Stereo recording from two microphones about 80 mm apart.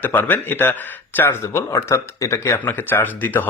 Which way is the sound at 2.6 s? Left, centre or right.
Left.